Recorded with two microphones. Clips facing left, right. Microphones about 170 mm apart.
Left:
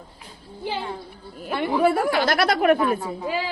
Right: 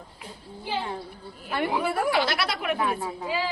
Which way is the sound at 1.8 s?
50° left (ahead or behind).